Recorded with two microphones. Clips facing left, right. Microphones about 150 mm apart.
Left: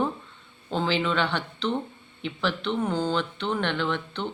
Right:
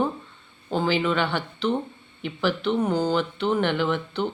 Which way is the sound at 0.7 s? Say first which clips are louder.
Right 2 dB; 5° right (ahead or behind).